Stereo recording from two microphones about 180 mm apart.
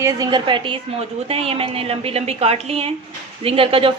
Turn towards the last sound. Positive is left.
turn(degrees=-30)  # may be behind; listen again after turning